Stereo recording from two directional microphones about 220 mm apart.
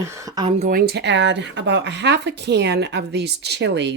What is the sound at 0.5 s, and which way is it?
Speech, 40° right (ahead or behind).